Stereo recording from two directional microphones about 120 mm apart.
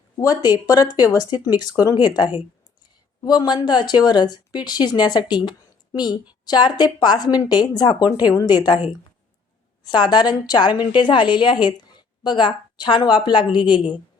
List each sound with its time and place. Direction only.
0.2 s speech: 30° left (ahead or behind)
9.8 s speech: 35° left (ahead or behind)